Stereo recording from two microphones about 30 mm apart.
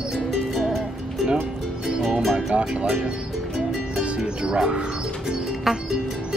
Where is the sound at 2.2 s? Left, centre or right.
Centre.